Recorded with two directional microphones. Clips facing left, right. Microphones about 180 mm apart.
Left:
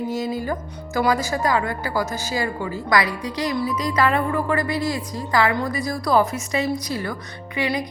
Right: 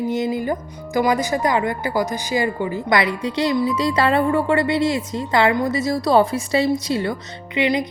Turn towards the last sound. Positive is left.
turn(degrees=-20)  # may be behind; listen again after turning